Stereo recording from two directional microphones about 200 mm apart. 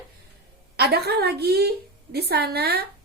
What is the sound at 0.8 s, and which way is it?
A woman's voice, 55° right (ahead or behind).